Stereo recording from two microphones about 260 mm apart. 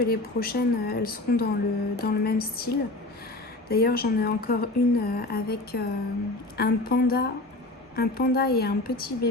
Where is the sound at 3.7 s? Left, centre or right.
Left.